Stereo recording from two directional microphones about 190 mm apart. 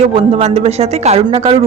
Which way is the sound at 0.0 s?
30° right (ahead or behind).